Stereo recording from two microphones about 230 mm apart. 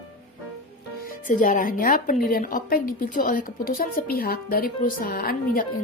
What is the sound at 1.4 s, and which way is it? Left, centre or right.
A woman's voice, left.